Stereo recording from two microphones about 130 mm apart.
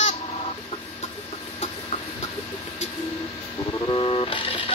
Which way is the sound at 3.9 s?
45° left (ahead or behind).